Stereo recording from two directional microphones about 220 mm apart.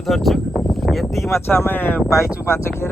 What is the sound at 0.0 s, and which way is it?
Speech, centre (ahead or behind).